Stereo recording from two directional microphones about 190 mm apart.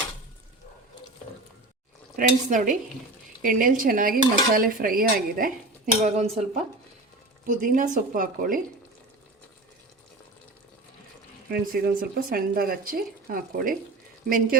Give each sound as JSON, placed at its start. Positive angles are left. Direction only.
{"t": 2.1, "sound": "speech", "side_deg": -45}
{"t": 11.4, "sound": "speech", "side_deg": -50}